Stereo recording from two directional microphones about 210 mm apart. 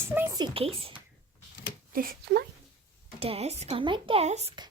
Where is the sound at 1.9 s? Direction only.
45° right (ahead or behind).